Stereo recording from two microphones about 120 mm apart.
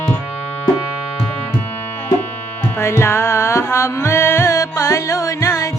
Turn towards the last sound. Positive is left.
turn(degrees=25)  # may be behind; listen again after turning